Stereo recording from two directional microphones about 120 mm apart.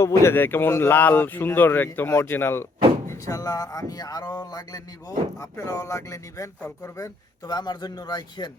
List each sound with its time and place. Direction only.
0.0 s speech: 20° left (ahead or behind)
3.1 s a man's voice: 30° left (ahead or behind)